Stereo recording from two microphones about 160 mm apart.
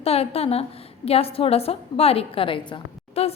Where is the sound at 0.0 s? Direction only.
40° left (ahead or behind).